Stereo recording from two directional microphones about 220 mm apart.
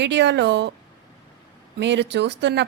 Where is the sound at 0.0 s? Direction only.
50° right (ahead or behind).